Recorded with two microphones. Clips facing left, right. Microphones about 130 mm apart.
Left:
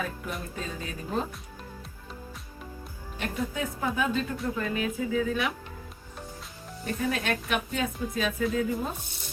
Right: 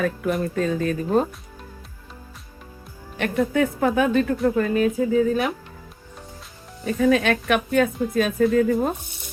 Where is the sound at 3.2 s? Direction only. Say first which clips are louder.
Right 11 dB; 65° right (ahead or behind); by 5.5 s 40° right (ahead or behind).